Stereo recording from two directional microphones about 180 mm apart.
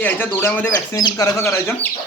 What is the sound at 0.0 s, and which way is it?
Speech, 10° left (ahead or behind).